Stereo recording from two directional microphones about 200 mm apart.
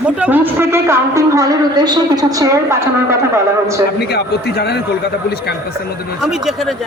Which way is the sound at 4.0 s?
55° left (ahead or behind).